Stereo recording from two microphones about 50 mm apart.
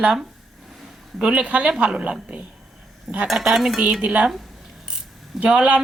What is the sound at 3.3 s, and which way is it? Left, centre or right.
Speech, centre.